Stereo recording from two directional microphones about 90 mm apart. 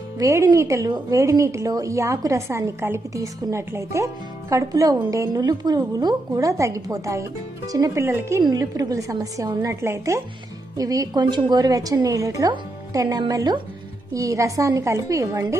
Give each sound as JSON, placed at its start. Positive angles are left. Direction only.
{"t": 0.2, "sound": "speech", "side_deg": -35}
{"t": 0.8, "sound": "a woman's voice", "side_deg": -50}
{"t": 1.2, "sound": "speech", "side_deg": -35}
{"t": 8.5, "sound": "speech", "side_deg": -45}
{"t": 10.8, "sound": "a woman's voice", "side_deg": -45}
{"t": 14.1, "sound": "speech", "side_deg": -35}